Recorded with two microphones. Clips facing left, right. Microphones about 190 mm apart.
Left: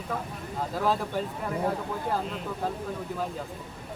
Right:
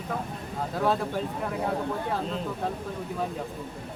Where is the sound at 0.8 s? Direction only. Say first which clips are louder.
Right 2 dB; centre (ahead or behind).